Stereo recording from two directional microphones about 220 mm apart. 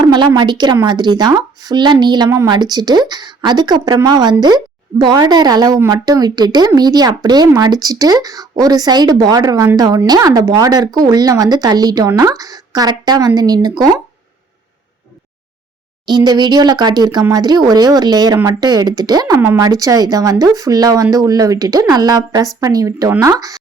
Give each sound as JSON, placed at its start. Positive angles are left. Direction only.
{"t": 0.0, "sound": "speech", "side_deg": -20}
{"t": 16.0, "sound": "speech", "side_deg": -20}